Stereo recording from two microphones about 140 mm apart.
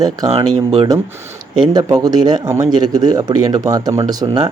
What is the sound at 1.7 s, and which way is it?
Speech, 30° right (ahead or behind).